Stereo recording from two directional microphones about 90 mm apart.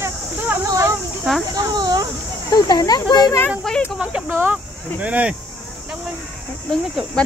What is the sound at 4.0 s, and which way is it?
Speech, 15° right (ahead or behind).